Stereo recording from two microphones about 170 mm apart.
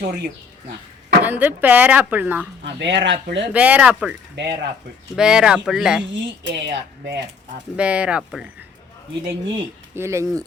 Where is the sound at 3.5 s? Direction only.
10° right (ahead or behind).